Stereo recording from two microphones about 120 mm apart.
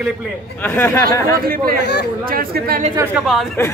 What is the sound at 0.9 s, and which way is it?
Speech, 25° left (ahead or behind).